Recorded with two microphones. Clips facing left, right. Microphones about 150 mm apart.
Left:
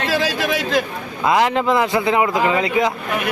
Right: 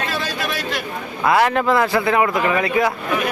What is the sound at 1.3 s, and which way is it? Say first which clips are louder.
Speech: even; 20° left (ahead or behind).